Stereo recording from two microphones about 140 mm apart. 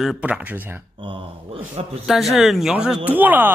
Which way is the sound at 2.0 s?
Centre (ahead or behind).